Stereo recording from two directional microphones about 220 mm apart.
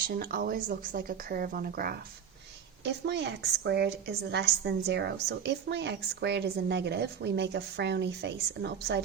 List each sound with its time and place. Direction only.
0.1 s speech: 40° right (ahead or behind)